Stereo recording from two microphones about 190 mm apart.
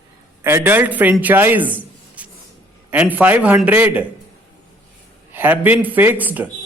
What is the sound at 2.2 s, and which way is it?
Vehicle, 5° right (ahead or behind).